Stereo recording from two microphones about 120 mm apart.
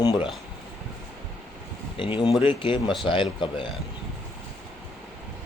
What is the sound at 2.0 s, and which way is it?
Speech, 45° left (ahead or behind).